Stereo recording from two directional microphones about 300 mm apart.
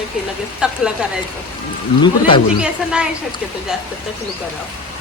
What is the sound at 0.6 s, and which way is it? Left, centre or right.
Speech, centre.